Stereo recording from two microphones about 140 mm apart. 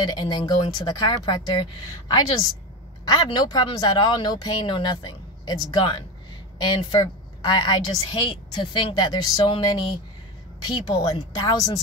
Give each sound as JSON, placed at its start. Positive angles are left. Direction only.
{"t": 0.0, "sound": "a woman's voice", "side_deg": 30}
{"t": 3.1, "sound": "a woman's voice", "side_deg": 30}